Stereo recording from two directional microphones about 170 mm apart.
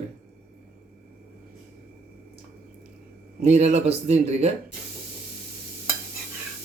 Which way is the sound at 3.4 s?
40° right (ahead or behind).